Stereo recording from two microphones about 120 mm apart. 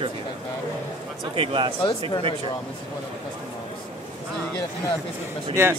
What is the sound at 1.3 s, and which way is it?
Speech, 45° right (ahead or behind).